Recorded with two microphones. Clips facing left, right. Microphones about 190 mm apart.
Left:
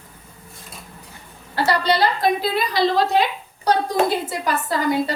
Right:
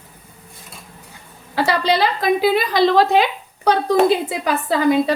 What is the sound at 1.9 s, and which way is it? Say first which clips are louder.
A woman's voice: right 2 dB; 90° right.